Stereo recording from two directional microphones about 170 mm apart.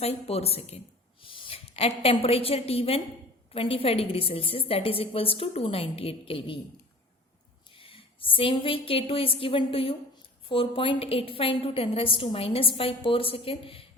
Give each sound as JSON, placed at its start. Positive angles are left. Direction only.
{"t": 0.0, "sound": "a woman's voice", "side_deg": 35}
{"t": 7.8, "sound": "a woman's voice", "side_deg": 30}